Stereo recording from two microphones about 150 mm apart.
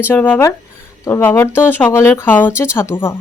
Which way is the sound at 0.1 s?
10° left (ahead or behind).